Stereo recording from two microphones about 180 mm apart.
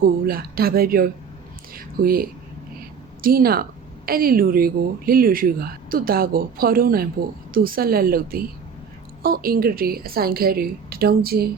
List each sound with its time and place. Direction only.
0.0 s a woman's voice: 55° right (ahead or behind)
1.7 s a sound: 55° right (ahead or behind)
3.2 s a woman's voice: 55° right (ahead or behind)